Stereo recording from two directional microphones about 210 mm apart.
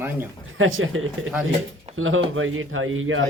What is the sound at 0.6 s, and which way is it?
Speech, 70° right (ahead or behind).